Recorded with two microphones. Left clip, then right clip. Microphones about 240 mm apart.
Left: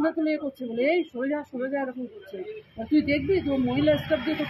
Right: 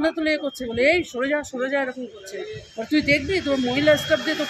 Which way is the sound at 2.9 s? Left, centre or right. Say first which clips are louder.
Right 3 dB; centre.